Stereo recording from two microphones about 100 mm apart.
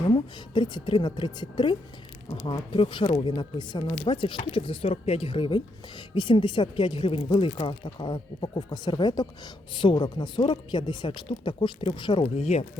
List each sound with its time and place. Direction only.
0.1 s speech: 50° left (ahead or behind)
12.2 s speech: 90° left